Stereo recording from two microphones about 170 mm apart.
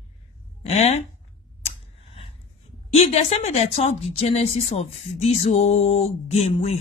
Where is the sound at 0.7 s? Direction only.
40° left (ahead or behind).